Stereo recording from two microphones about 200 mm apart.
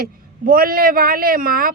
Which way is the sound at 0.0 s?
45° right (ahead or behind).